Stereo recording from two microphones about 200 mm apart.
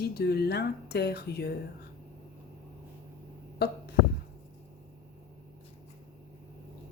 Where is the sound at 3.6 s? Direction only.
55° left (ahead or behind).